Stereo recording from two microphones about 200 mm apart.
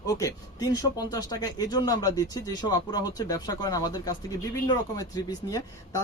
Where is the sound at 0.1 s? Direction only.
15° left (ahead or behind).